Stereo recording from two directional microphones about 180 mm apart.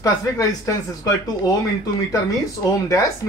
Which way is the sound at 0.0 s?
20° left (ahead or behind).